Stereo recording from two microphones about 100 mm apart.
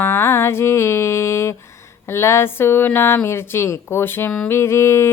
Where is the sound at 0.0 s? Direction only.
25° left (ahead or behind).